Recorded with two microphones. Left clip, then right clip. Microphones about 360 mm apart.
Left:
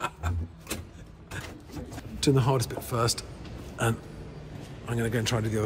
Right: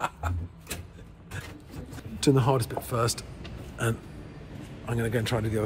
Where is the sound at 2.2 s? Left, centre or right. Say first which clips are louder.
Right 1 dB; centre.